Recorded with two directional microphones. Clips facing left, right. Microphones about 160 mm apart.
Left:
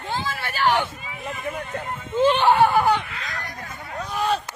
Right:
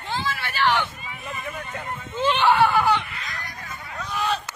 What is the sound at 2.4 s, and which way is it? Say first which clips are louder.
Speech: right 1 dB; 30° left (ahead or behind).